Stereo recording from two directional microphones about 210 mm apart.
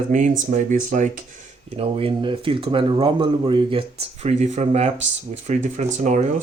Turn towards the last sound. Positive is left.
turn(degrees=-35)  # may be behind; listen again after turning